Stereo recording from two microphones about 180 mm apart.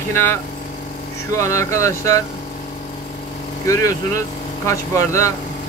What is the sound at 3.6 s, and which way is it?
Speech, 20° left (ahead or behind).